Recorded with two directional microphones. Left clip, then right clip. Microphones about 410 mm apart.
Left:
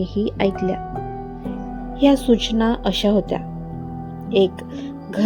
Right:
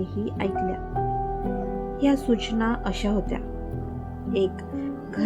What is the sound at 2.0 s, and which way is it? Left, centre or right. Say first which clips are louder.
A woman's voice: left 8 dB; centre.